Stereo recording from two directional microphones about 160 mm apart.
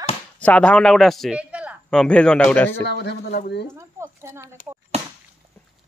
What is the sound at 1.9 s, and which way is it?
Speech, 5° left (ahead or behind).